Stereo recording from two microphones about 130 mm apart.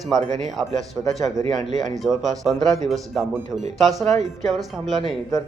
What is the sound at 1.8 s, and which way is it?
A man's voice, centre (ahead or behind).